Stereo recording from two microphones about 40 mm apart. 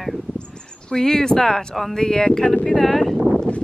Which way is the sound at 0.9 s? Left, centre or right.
Centre.